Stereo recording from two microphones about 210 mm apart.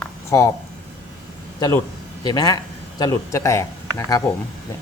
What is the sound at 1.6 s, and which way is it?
A man's voice, 20° left (ahead or behind).